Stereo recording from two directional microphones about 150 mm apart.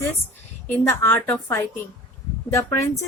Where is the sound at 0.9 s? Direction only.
15° left (ahead or behind).